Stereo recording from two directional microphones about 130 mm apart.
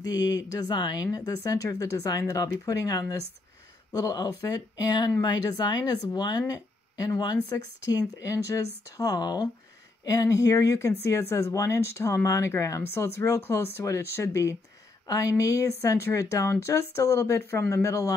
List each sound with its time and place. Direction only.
0.0 s speech: 30° left (ahead or behind)